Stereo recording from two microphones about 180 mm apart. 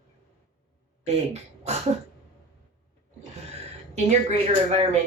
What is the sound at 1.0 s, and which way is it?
Speech, 35° right (ahead or behind).